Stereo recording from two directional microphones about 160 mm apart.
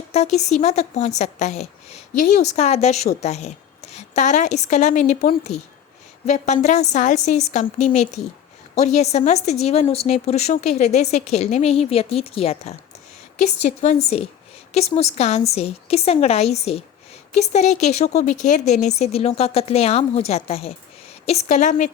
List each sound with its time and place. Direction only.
0.1 s a woman's voice: 45° left (ahead or behind)